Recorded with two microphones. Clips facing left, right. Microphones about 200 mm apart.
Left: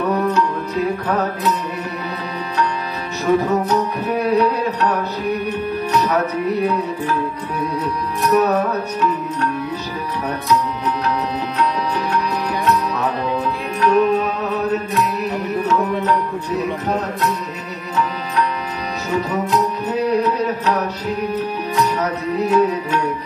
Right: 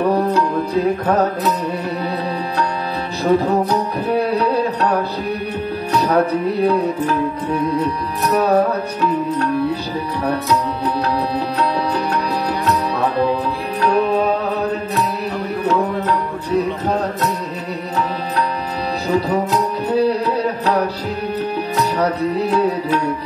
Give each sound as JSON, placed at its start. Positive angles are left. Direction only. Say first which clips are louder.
{"t": 0.0, "sound": "music", "louder": "right 2 dB", "side_deg": -30}
{"t": 3.3, "sound": "music", "louder": "right 1 dB", "side_deg": -35}
{"t": 6.0, "sound": "music", "louder": "right 3 dB", "side_deg": -30}
{"t": 8.4, "sound": "music", "louder": "right 3 dB", "side_deg": -30}
{"t": 12.9, "sound": "music", "louder": "right 4 dB", "side_deg": -35}
{"t": 19.0, "sound": "music", "louder": "right 3 dB", "side_deg": -35}